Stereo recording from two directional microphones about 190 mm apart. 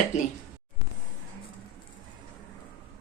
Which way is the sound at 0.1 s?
40° left (ahead or behind).